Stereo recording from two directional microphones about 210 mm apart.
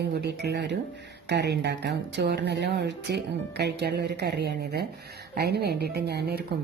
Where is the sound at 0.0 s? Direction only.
50° right (ahead or behind).